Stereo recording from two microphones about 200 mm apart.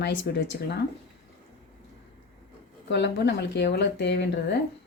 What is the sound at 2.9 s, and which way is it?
Speech, 60° left (ahead or behind).